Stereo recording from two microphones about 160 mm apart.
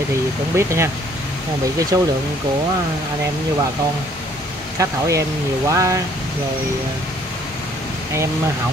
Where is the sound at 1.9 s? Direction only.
25° right (ahead or behind).